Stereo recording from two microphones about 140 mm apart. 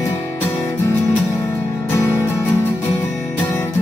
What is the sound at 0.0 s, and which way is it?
Music, 15° left (ahead or behind).